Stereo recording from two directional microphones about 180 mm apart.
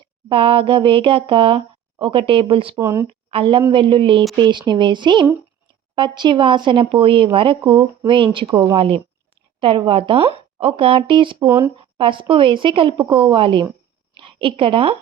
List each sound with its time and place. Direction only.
0.3 s speech: 30° right (ahead or behind)
2.7 s speech: 15° right (ahead or behind)
3.2 s a woman's voice: 30° right (ahead or behind)
11.4 s speech: 10° right (ahead or behind)
11.9 s a woman's voice: 30° right (ahead or behind)